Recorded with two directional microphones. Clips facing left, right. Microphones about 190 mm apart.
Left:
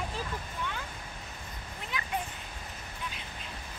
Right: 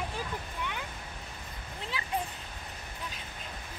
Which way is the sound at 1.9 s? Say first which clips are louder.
Left 3 dB; 30° right (ahead or behind).